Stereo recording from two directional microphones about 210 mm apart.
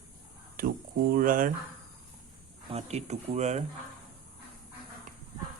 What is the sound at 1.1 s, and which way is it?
Speech, 40° right (ahead or behind).